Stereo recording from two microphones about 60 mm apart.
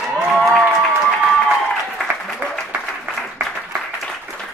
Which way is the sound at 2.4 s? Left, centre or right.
Right.